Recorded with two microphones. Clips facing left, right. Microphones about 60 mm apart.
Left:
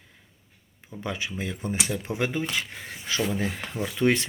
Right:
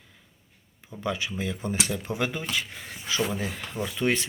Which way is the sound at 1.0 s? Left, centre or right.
Left.